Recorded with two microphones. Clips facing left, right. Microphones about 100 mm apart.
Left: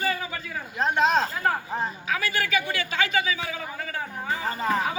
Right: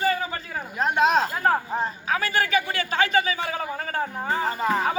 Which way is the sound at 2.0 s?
35° right (ahead or behind).